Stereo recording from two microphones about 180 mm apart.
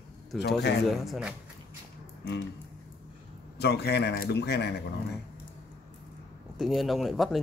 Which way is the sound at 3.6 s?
65° left (ahead or behind).